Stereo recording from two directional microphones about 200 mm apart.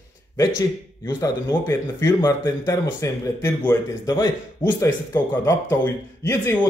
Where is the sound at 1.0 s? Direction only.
15° left (ahead or behind).